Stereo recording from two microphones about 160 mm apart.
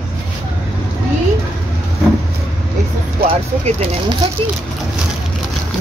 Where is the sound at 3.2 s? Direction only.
35° right (ahead or behind).